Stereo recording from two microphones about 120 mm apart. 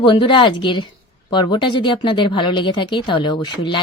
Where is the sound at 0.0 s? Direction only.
45° left (ahead or behind).